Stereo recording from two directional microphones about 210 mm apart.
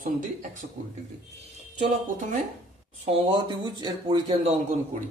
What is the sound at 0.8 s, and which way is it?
Speech, 30° right (ahead or behind).